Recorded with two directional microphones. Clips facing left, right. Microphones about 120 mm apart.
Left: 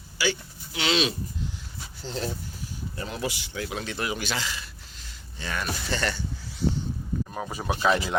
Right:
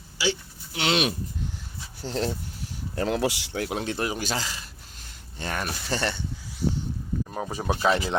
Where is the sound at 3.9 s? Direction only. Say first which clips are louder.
Right 2 dB; 40° right (ahead or behind).